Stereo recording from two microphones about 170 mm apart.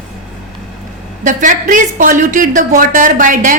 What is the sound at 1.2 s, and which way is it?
Speech, 50° right (ahead or behind).